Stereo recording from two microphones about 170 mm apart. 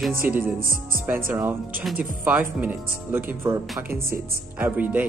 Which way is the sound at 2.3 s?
10° right (ahead or behind).